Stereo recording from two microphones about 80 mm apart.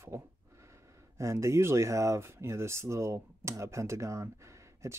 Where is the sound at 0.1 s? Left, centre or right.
Right.